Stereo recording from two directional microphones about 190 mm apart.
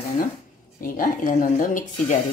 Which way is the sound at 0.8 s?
45° left (ahead or behind).